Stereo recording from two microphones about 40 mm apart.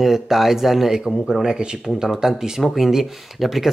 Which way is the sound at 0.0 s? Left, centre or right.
Centre.